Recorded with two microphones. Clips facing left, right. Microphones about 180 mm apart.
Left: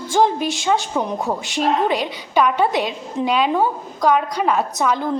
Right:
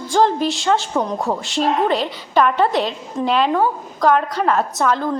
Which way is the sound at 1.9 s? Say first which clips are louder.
Right 1 dB; 5° left (ahead or behind).